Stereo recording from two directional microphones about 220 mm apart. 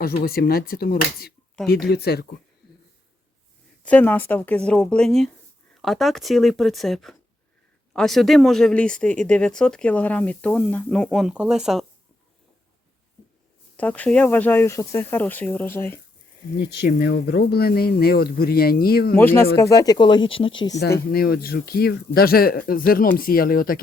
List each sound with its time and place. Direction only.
0.0 s speech: 45° left (ahead or behind)
3.8 s speech: 5° left (ahead or behind)
13.7 s speech: 5° left (ahead or behind)
16.6 s speech: 45° left (ahead or behind)
19.1 s speech: 10° left (ahead or behind)
20.7 s speech: 45° left (ahead or behind)